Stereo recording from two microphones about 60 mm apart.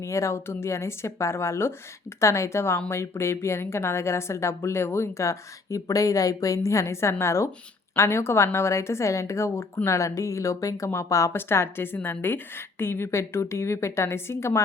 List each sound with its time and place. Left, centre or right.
0.0 s a woman's voice: left
11.3 s a woman's voice: left